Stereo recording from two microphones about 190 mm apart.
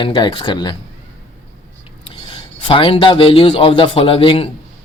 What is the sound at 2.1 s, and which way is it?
Speech, 25° left (ahead or behind).